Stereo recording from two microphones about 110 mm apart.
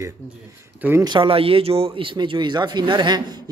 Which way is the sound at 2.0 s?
50° right (ahead or behind).